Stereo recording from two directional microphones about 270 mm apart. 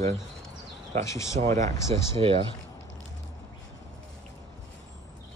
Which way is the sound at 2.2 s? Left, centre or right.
Centre.